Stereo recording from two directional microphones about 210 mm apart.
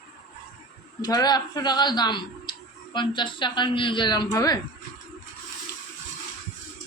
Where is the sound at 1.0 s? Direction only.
20° left (ahead or behind).